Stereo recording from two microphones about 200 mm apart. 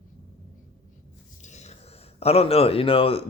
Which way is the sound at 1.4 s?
35° left (ahead or behind).